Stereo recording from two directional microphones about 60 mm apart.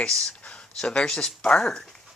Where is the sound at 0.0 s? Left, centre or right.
Centre.